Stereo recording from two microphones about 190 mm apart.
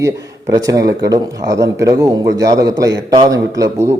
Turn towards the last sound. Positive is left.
turn(degrees=-15)  # may be behind; listen again after turning